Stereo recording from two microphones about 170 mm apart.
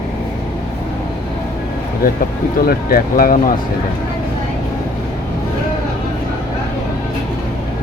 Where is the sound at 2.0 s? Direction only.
55° left (ahead or behind).